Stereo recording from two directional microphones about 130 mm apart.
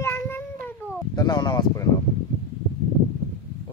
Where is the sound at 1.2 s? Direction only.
35° left (ahead or behind).